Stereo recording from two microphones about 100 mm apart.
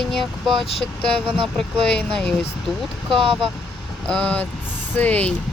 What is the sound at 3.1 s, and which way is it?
Speech, 60° right (ahead or behind).